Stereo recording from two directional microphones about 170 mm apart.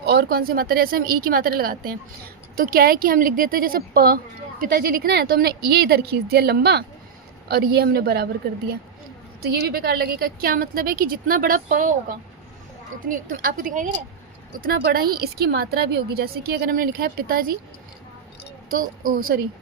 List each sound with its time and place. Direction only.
0.0 s speech: 70° right (ahead or behind)
9.4 s speech: 70° right (ahead or behind); by 13.9 s 50° right (ahead or behind)
14.6 s speech: 60° right (ahead or behind)
18.7 s speech: 55° right (ahead or behind)